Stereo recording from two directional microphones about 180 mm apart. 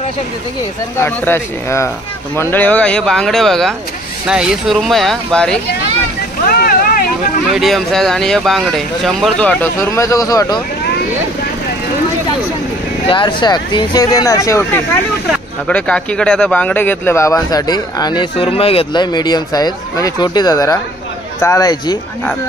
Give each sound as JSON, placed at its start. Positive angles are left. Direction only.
{"t": 0.9, "sound": "speech", "side_deg": 15}
{"t": 6.5, "sound": "vehicle", "side_deg": 55}
{"t": 7.5, "sound": "speech", "side_deg": 0}
{"t": 13.1, "sound": "speech", "side_deg": 25}